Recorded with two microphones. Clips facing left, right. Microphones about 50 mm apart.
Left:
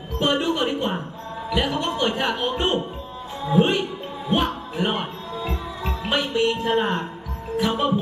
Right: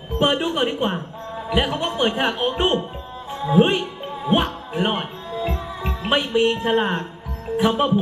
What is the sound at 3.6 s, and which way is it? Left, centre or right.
Speech, centre.